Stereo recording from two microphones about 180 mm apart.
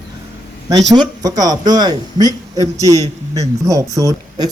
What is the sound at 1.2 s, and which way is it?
A man's voice, 20° right (ahead or behind).